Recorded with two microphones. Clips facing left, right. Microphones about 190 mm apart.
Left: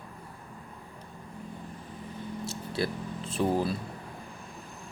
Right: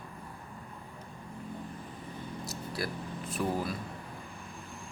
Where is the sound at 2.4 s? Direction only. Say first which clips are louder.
Left 5 dB; 25° left (ahead or behind).